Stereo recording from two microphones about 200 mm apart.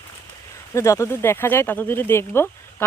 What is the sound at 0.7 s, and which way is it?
Speech, 15° left (ahead or behind).